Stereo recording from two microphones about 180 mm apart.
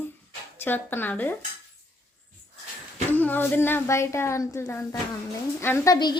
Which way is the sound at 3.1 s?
10° left (ahead or behind).